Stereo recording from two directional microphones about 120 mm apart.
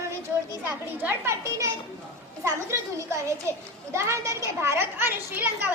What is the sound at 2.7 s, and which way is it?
A woman's voice, 25° right (ahead or behind).